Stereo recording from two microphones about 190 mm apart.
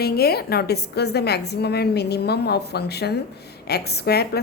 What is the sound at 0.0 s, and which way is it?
A woman's voice, 55° left (ahead or behind).